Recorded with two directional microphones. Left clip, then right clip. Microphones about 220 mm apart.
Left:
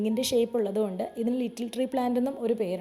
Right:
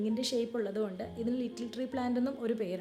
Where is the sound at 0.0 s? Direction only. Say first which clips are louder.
Left 7 dB; 25° left (ahead or behind).